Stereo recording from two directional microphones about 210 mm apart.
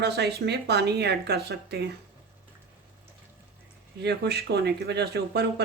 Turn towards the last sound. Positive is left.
turn(degrees=-55)  # may be behind; listen again after turning